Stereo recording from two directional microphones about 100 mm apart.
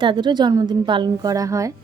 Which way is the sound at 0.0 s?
55° right (ahead or behind).